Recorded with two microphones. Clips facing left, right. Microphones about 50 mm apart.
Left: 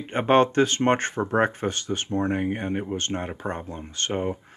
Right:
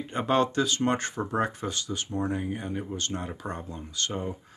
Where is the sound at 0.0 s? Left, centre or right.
Left.